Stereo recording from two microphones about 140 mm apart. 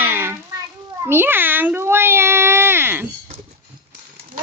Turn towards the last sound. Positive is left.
turn(degrees=-15)  # may be behind; listen again after turning